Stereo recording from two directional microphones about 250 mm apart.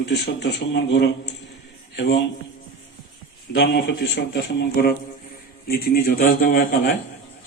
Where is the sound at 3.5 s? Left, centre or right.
Left.